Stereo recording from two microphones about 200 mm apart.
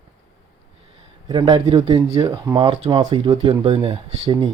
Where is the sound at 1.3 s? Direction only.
25° right (ahead or behind).